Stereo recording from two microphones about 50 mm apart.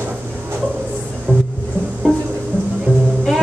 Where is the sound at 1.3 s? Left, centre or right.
Left.